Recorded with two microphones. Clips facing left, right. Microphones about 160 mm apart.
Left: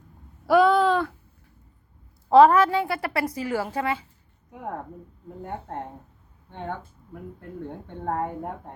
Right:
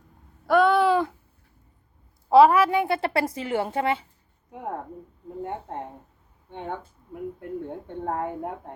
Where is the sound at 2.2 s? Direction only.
5° right (ahead or behind); by 4.0 s 25° right (ahead or behind).